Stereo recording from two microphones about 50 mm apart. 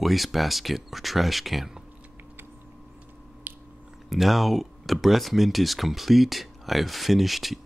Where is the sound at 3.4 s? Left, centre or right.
Right.